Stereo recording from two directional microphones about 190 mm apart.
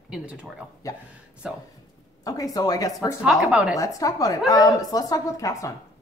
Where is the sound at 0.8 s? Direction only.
15° left (ahead or behind).